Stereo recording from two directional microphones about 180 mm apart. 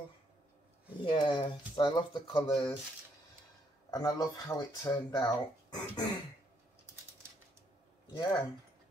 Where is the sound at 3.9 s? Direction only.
20° left (ahead or behind).